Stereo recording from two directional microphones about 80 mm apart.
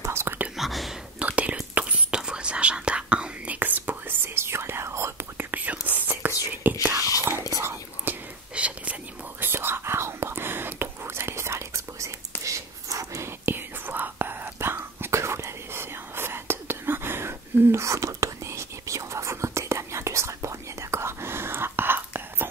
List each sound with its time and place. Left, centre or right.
0.0 s whispering: right
0.6 s whispering: centre
1.2 s whispering: centre; by 5.5 s right
5.5 s whispering: right
8.1 s whispering: right
9.4 s whispering: right
13.5 s whispering: right